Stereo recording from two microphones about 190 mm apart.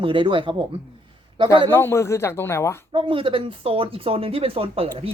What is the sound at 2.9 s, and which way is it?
Speech, 25° right (ahead or behind).